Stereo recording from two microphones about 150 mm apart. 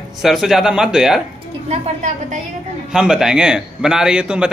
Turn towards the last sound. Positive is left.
turn(degrees=-5)  # may be behind; listen again after turning